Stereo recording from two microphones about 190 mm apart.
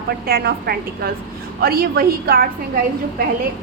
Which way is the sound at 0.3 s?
55° right (ahead or behind).